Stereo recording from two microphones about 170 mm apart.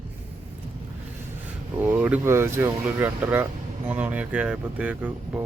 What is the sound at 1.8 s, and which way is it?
Speech, 10° right (ahead or behind).